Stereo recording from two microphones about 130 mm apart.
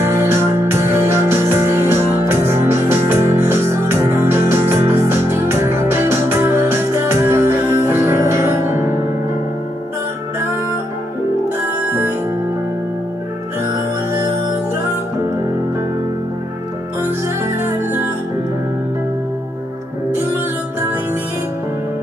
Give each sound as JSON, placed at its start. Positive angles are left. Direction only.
{"t": 0.0, "sound": "music", "side_deg": -20}
{"t": 11.6, "sound": "music", "side_deg": -15}
{"t": 17.6, "sound": "music", "side_deg": -20}